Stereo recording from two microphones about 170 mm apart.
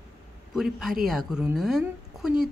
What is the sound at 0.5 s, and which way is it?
Speech, centre (ahead or behind).